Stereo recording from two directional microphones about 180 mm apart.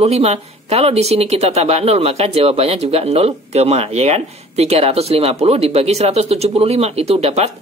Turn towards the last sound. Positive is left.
turn(degrees=-35)  # may be behind; listen again after turning